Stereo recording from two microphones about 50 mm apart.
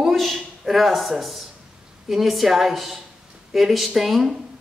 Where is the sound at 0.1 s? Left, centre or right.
Centre.